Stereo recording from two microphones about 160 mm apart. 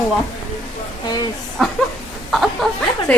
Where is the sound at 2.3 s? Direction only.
Centre (ahead or behind).